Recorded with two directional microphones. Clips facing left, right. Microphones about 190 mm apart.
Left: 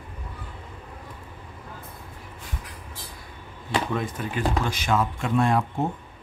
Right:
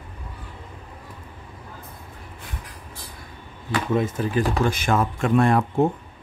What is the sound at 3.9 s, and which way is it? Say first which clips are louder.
Speech: right 6 dB; 25° right (ahead or behind).